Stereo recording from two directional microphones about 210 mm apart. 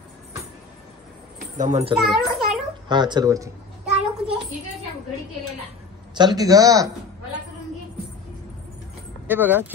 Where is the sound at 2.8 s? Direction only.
20° right (ahead or behind).